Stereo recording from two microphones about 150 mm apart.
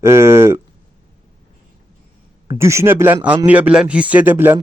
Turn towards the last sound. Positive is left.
turn(degrees=-15)  # may be behind; listen again after turning